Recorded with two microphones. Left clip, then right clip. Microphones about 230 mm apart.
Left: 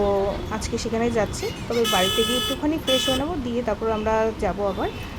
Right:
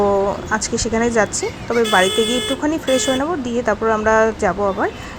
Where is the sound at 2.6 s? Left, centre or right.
Centre.